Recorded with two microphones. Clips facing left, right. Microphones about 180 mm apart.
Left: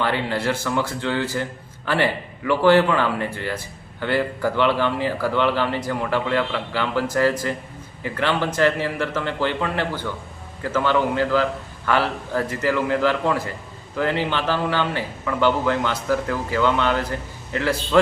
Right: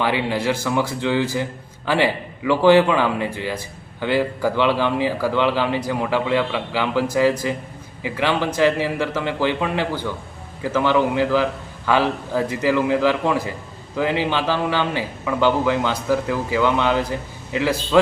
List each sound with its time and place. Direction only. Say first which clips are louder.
0.0 s speech: right 2 dB; 10° right (ahead or behind)